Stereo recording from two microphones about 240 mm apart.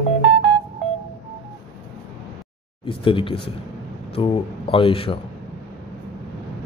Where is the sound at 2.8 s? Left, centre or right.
Left.